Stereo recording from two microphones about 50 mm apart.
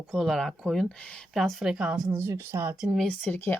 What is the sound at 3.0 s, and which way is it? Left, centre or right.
Speech, left.